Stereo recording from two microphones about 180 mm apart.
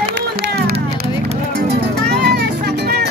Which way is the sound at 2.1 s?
70° right (ahead or behind).